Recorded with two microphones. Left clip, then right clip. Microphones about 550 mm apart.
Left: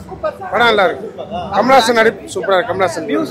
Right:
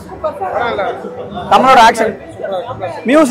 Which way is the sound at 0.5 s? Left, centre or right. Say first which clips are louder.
Left 7 dB; left.